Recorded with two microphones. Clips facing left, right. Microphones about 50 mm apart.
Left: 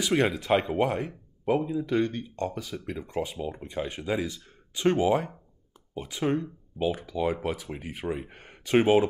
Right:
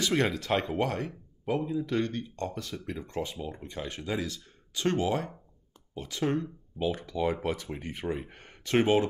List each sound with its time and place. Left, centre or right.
0.0 s speech: centre